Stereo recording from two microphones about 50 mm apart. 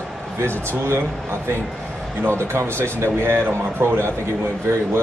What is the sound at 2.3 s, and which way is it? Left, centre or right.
Speech, right.